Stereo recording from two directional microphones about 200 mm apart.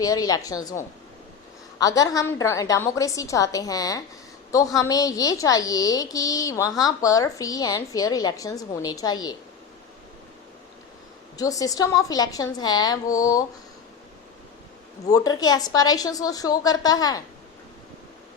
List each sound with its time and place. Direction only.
0.0 s a woman's voice: 20° left (ahead or behind)
1.8 s a woman's voice: 15° left (ahead or behind)
11.3 s a woman's voice: 15° left (ahead or behind)
15.1 s a woman's voice: 20° left (ahead or behind)